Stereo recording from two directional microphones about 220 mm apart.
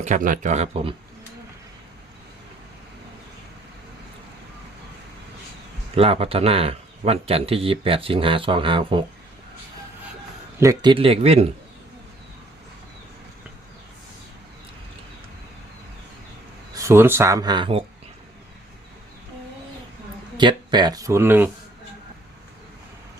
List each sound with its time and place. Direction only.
0.0 s speech: 35° right (ahead or behind)
5.9 s speech: 25° right (ahead or behind)
10.6 s speech: 15° right (ahead or behind)
16.7 s speech: 10° right (ahead or behind)
20.3 s speech: 20° right (ahead or behind)